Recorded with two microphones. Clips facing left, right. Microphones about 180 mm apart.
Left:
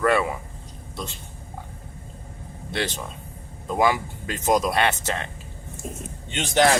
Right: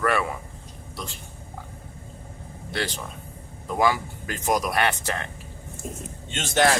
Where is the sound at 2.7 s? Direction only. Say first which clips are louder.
Left 2 dB; 20° left (ahead or behind).